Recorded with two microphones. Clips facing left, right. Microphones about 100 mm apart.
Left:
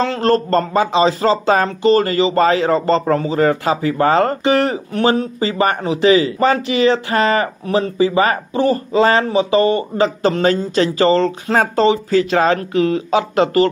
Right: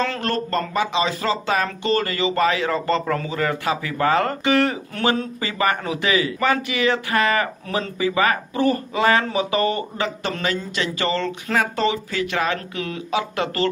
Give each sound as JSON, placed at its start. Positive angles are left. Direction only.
{"t": 0.0, "sound": "speech", "side_deg": 30}